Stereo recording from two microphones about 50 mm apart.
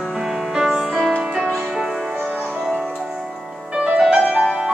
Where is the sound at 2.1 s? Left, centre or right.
Right.